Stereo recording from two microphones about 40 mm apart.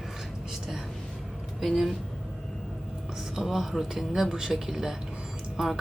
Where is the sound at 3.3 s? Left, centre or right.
Centre.